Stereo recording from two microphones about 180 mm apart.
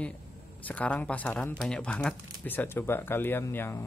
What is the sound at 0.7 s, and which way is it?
Speech, 10° left (ahead or behind).